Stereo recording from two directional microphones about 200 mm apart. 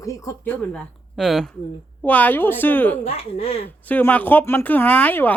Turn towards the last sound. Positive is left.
turn(degrees=10)  # may be behind; listen again after turning